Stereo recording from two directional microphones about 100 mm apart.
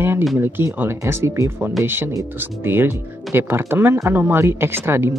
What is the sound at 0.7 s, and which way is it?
Speech, 25° right (ahead or behind).